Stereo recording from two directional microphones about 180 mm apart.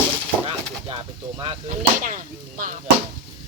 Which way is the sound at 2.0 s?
50° right (ahead or behind).